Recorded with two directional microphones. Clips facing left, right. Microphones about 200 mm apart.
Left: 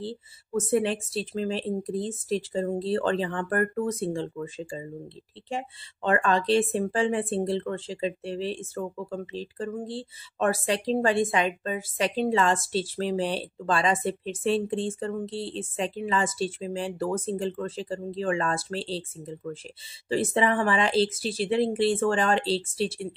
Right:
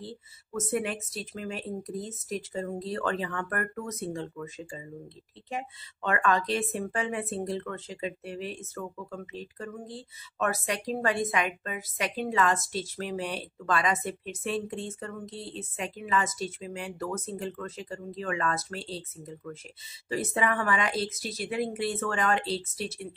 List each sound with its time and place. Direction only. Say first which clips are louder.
0.0 s speech: left 7 dB; 30° left (ahead or behind)